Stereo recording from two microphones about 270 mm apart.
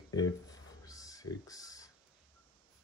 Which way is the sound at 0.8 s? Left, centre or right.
Centre.